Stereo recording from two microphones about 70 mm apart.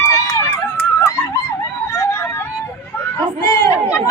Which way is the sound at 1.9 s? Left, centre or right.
Left.